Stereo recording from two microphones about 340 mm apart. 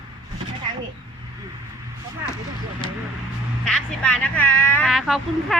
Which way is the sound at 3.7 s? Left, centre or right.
Centre.